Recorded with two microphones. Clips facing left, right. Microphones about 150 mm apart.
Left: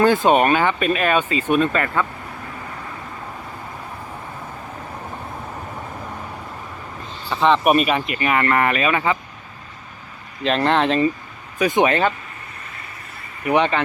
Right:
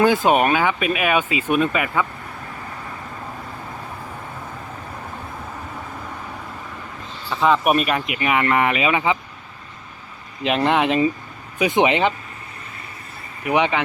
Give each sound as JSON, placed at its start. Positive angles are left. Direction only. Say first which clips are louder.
{"t": 0.0, "sound": "speech", "louder": "left 1 dB", "side_deg": -10}
{"t": 7.4, "sound": "speech", "louder": "left 2 dB", "side_deg": -5}
{"t": 10.4, "sound": "speech", "louder": "even", "side_deg": -10}
{"t": 13.5, "sound": "speech", "louder": "left 1 dB", "side_deg": -10}